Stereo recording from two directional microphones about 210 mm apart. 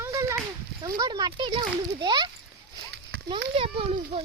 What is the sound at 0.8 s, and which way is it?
A child's voice, 20° right (ahead or behind).